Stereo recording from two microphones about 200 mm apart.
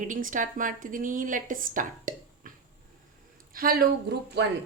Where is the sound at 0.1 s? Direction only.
40° right (ahead or behind).